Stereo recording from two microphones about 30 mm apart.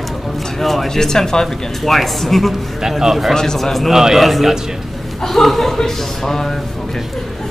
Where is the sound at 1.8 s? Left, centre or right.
Centre.